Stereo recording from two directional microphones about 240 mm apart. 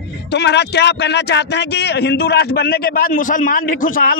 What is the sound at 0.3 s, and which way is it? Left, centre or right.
Speech, left.